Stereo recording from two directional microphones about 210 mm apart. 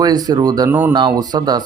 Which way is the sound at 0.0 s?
15° right (ahead or behind).